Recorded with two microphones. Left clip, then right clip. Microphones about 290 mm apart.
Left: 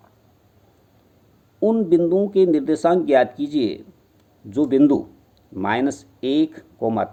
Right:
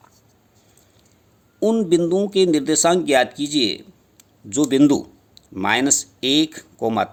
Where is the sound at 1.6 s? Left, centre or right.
Right.